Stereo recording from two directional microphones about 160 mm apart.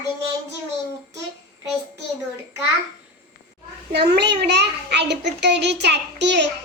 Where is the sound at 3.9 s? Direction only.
90° right.